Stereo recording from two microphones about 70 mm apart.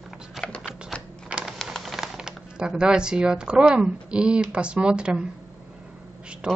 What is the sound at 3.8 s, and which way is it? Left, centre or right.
Speech, centre.